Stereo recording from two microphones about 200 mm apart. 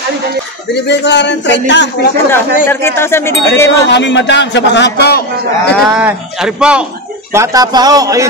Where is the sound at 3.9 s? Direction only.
65° left (ahead or behind).